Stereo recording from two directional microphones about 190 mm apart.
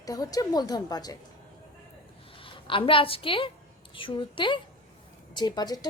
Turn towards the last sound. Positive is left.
turn(degrees=20)  # may be behind; listen again after turning